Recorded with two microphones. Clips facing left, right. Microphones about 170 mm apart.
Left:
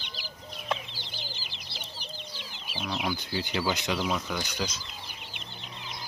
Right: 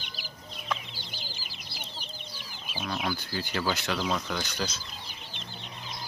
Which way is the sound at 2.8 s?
10° left (ahead or behind).